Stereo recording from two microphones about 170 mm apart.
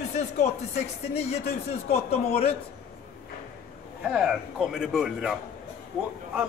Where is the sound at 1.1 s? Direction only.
40° left (ahead or behind).